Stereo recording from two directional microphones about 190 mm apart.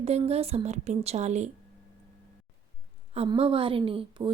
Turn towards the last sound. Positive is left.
turn(degrees=-30)  # may be behind; listen again after turning